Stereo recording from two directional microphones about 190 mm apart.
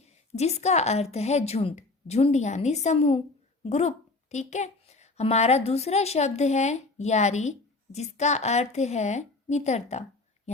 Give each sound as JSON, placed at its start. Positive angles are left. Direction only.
{"t": 0.0, "sound": "a woman's voice", "side_deg": 35}